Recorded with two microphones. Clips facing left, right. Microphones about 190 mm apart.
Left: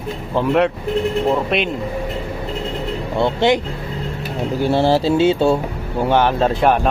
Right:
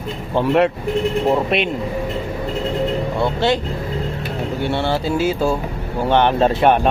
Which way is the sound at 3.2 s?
15° left (ahead or behind).